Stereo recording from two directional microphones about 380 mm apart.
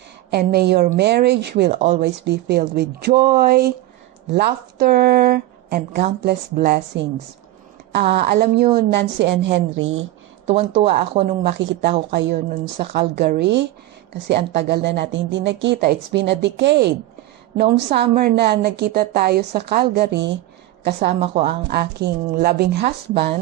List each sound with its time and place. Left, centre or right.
0.3 s a woman's voice: right
2.0 s a woman's voice: right
10.4 s a woman's voice: centre
21.2 s a woman's voice: centre